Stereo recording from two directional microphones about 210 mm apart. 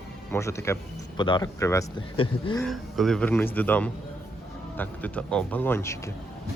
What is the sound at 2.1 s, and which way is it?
Speech, 25° left (ahead or behind).